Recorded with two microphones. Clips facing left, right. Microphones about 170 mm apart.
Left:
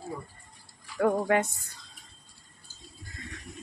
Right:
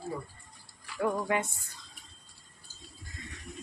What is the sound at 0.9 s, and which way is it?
Speech, 50° left (ahead or behind).